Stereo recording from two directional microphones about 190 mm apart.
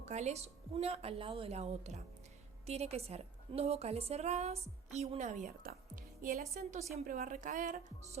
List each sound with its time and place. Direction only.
0.0 s a woman's voice: 35° right (ahead or behind)